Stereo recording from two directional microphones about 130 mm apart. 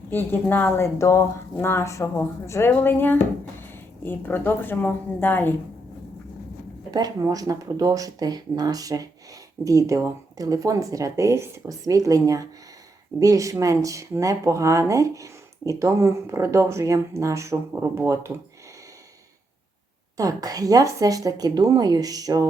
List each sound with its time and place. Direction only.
0.1 s a woman's voice: 15° left (ahead or behind)
6.9 s speech: 30° right (ahead or behind)
20.1 s speech: 30° right (ahead or behind)